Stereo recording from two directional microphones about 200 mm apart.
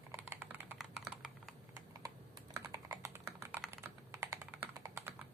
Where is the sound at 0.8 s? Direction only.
Centre (ahead or behind).